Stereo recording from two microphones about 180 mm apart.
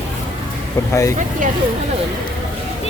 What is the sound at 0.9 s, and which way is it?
Speech, 15° left (ahead or behind).